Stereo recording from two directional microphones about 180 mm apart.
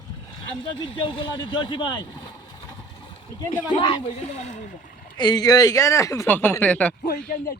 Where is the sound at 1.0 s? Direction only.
25° left (ahead or behind).